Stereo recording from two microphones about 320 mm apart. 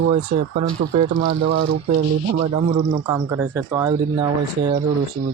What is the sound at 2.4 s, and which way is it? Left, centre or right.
Speech, centre.